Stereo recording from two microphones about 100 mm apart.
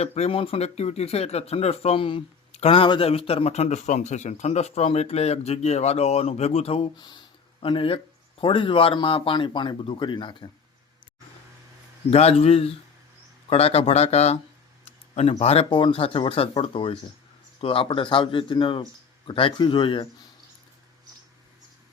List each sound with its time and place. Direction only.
0.0 s speech: 90° left
7.0 s speech: 50° left (ahead or behind)
12.1 s speech: 90° left
15.9 s speech: 65° left (ahead or behind)
17.8 s speech: 55° left (ahead or behind)